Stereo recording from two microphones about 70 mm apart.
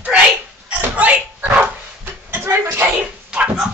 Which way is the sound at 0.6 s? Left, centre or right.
Right.